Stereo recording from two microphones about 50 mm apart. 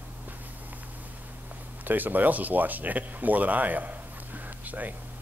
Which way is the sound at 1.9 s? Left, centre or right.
Right.